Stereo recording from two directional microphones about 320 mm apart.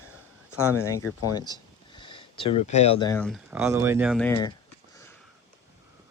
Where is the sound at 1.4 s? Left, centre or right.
Centre.